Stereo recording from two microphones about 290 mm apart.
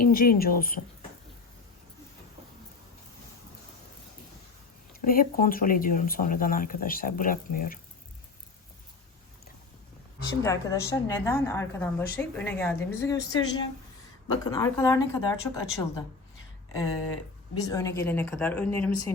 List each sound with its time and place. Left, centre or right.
0.0 s speech: left
4.9 s speech: left
10.4 s a woman's voice: centre